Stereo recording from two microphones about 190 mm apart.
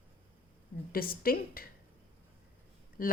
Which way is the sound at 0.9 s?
50° left (ahead or behind).